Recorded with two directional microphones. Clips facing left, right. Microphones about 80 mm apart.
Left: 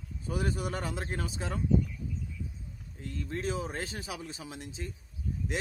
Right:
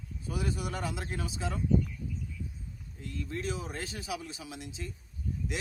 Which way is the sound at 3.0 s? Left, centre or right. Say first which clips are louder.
Left 1 dB; left.